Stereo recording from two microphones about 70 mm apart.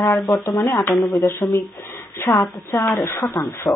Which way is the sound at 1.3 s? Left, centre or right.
Left.